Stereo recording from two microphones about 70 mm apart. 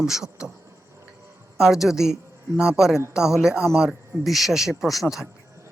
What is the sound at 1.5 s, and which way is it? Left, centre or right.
Speech, centre.